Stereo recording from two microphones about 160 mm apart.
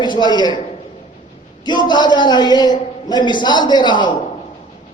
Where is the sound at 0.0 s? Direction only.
25° left (ahead or behind).